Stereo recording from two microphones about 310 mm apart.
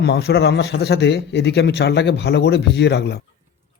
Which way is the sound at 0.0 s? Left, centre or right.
Left.